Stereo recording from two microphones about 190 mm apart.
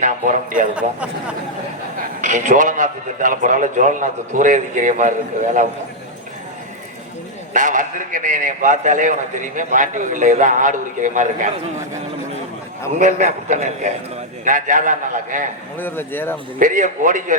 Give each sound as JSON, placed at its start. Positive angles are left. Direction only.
{"t": 0.0, "sound": "a man's voice", "side_deg": -45}
{"t": 2.2, "sound": "a man's voice", "side_deg": -40}
{"t": 7.5, "sound": "a man's voice", "side_deg": -45}
{"t": 13.0, "sound": "a man's voice", "side_deg": -40}
{"t": 15.8, "sound": "speech", "side_deg": 10}
{"t": 16.6, "sound": "a man's voice", "side_deg": -40}